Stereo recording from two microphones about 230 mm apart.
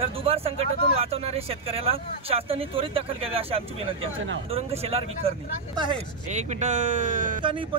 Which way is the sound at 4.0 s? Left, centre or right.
Right.